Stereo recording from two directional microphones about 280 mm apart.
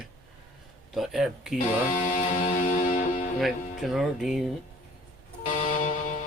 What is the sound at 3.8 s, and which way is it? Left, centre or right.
Speech, centre.